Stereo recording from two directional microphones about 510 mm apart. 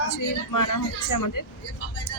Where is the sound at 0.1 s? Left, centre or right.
Left.